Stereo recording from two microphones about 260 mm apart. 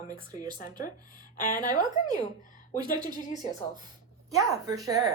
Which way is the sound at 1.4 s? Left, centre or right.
Left.